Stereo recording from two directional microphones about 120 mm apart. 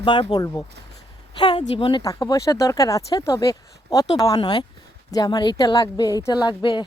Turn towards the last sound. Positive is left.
turn(degrees=40)  # may be behind; listen again after turning